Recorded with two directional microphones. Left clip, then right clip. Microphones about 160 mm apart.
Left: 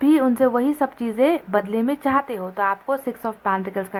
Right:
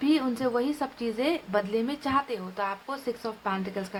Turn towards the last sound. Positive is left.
turn(degrees=40)  # may be behind; listen again after turning